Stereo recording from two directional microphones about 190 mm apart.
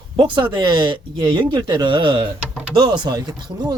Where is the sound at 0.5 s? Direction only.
25° right (ahead or behind).